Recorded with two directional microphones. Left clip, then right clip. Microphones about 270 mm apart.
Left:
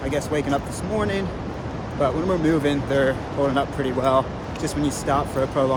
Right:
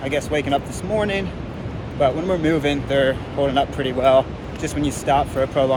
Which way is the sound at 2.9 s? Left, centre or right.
Centre.